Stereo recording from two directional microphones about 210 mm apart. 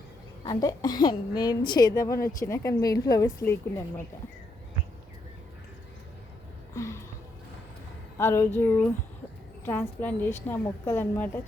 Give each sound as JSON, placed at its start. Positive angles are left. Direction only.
{"t": 0.4, "sound": "a woman's voice", "side_deg": 20}
{"t": 6.7, "sound": "a sound", "side_deg": 15}
{"t": 8.2, "sound": "a woman's voice", "side_deg": 10}